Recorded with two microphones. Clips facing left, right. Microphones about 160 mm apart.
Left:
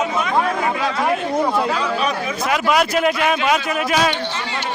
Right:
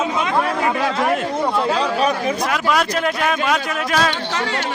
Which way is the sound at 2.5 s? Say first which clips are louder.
Left 6 dB; 5° left (ahead or behind).